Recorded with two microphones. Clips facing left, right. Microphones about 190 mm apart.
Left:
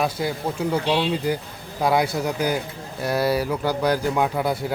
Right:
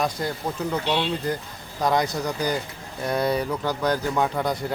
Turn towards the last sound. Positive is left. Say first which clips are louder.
# left 2 dB
turn(degrees=5)  # may be behind; listen again after turning